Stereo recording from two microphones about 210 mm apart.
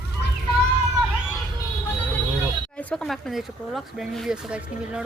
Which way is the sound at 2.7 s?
5° left (ahead or behind).